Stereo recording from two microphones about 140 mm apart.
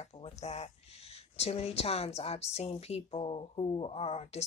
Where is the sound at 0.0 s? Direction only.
50° left (ahead or behind).